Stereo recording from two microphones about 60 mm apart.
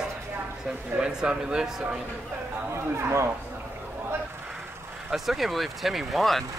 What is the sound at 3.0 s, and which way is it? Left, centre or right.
Speech, right.